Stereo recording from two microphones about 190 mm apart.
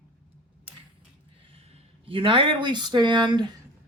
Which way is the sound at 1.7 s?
30° right (ahead or behind).